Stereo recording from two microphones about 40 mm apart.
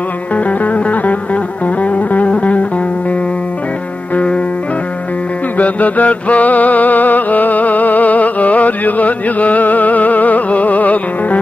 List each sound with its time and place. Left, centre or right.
0.4 s music: left
4.1 s music: left
5.6 s mantra: left